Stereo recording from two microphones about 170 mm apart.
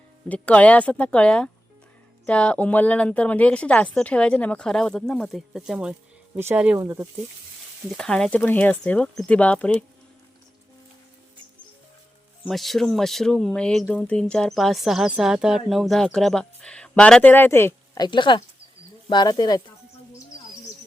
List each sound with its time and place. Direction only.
0.3 s a woman's voice: 10° left (ahead or behind); by 7.1 s 20° right (ahead or behind)
7.9 s a woman's voice: 5° left (ahead or behind)
12.5 s speech: centre (ahead or behind); by 19.6 s 25° left (ahead or behind)